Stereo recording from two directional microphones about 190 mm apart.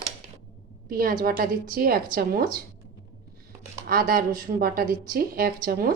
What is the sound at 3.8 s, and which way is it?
Speech, 50° right (ahead or behind).